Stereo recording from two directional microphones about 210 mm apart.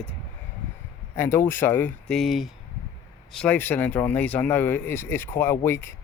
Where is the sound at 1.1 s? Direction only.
10° left (ahead or behind).